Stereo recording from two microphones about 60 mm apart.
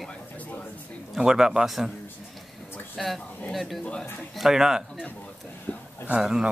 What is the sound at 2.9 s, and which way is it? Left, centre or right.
Speech, centre.